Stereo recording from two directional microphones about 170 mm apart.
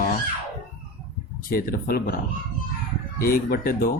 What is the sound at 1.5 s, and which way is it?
Speech, 60° left (ahead or behind).